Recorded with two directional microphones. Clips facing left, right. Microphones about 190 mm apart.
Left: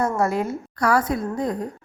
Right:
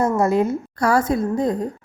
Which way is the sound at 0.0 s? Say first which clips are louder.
Right 4 dB; 20° right (ahead or behind).